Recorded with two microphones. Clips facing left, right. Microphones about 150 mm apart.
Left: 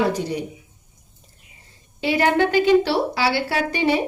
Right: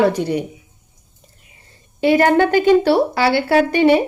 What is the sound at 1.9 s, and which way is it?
A woman's voice, 50° right (ahead or behind).